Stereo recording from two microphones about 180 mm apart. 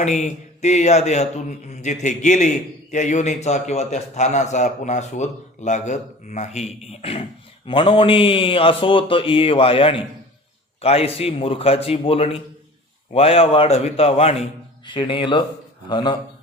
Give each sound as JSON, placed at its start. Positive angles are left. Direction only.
{"t": 0.0, "sound": "a man's voice", "side_deg": 40}